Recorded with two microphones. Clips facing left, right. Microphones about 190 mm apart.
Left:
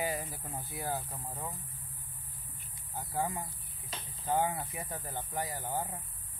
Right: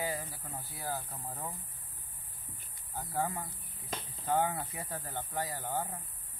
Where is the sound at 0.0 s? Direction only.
15° left (ahead or behind).